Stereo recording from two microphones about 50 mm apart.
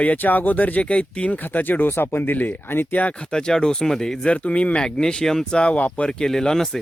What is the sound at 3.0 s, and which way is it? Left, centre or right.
Speech, left.